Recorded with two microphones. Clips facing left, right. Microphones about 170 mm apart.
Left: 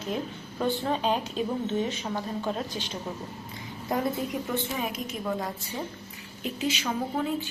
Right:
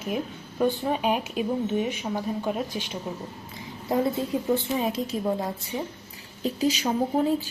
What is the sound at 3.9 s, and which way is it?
A woman's voice, 25° right (ahead or behind).